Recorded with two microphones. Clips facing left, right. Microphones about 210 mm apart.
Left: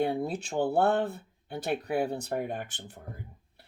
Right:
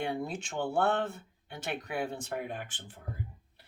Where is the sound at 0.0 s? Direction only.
35° left (ahead or behind).